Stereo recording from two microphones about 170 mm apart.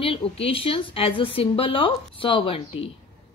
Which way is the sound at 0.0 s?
35° left (ahead or behind).